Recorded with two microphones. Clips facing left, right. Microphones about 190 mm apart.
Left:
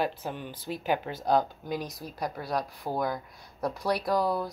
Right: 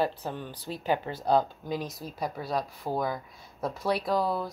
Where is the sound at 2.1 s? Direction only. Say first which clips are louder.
Even; 5° right (ahead or behind).